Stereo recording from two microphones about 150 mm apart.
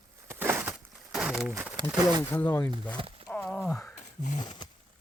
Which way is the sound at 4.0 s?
55° left (ahead or behind).